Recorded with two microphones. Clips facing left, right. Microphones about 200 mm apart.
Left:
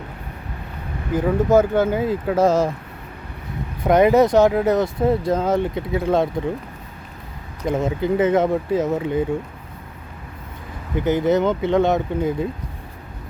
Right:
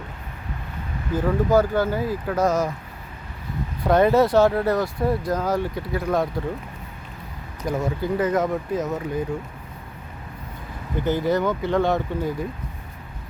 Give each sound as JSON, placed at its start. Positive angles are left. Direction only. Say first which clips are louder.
{"t": 1.1, "sound": "speech", "louder": "left 3 dB", "side_deg": 20}
{"t": 3.8, "sound": "speech", "louder": "left 3 dB", "side_deg": 20}
{"t": 7.6, "sound": "speech", "louder": "left 4 dB", "side_deg": 25}
{"t": 11.0, "sound": "speech", "louder": "left 4 dB", "side_deg": 20}